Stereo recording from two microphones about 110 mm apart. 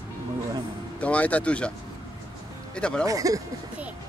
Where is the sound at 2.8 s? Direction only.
10° left (ahead or behind).